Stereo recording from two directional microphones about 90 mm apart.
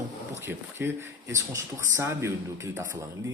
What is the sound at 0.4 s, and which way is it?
Speech, 25° right (ahead or behind).